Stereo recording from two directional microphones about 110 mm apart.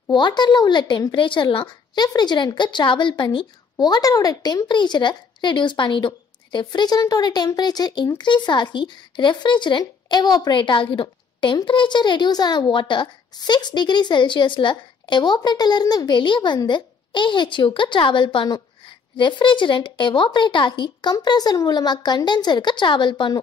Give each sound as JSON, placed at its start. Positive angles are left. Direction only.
{"t": 0.1, "sound": "a woman's voice", "side_deg": 40}